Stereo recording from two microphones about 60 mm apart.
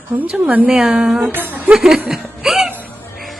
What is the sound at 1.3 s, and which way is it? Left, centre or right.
Speech, right.